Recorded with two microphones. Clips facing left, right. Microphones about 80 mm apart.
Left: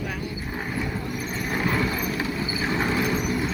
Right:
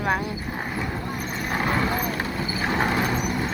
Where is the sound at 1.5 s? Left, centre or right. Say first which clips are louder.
Right 2 dB; right.